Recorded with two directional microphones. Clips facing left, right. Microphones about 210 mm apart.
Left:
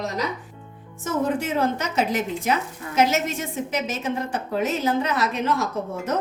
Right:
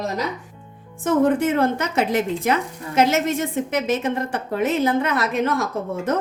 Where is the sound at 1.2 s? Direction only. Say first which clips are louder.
Right 4 dB; 55° right (ahead or behind).